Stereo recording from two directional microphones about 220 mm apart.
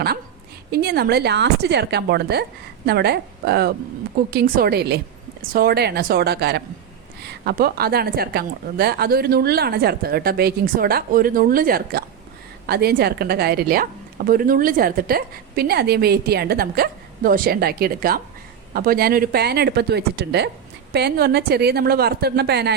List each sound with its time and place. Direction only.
0.7 s a woman's voice: 45° right (ahead or behind)